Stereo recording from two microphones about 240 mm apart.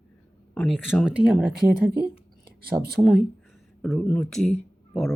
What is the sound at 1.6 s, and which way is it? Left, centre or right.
Speech, right.